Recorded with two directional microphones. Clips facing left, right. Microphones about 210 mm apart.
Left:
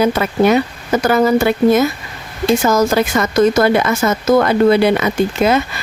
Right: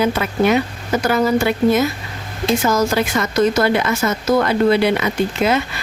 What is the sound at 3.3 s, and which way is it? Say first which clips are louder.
Speech: left 4 dB; 45° left (ahead or behind).